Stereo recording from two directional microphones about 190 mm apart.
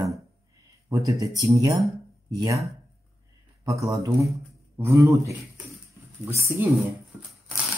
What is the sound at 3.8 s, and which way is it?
Speech, 15° right (ahead or behind).